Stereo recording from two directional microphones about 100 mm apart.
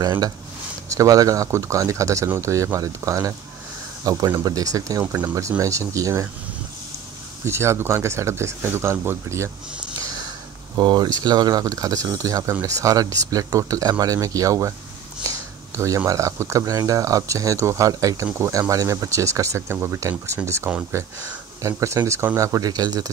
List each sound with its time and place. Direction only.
0.9 s speech: 35° right (ahead or behind)
5.0 s speech: 15° right (ahead or behind)
5.6 s speech: 35° right (ahead or behind)
7.4 s speech: 25° right (ahead or behind)
10.8 s speech: 45° right (ahead or behind)
15.2 s a sound: 30° right (ahead or behind)
16.1 s speech: 30° right (ahead or behind)
21.6 s speech: 30° right (ahead or behind)